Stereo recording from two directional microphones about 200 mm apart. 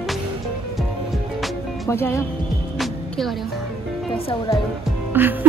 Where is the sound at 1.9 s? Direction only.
15° left (ahead or behind).